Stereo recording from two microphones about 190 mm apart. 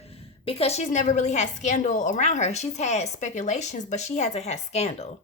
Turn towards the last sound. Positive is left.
turn(degrees=35)  # may be behind; listen again after turning